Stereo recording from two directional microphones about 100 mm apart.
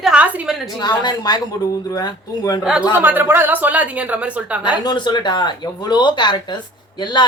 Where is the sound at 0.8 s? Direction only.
45° left (ahead or behind).